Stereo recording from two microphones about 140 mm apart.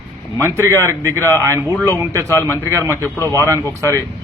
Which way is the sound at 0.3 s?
20° right (ahead or behind).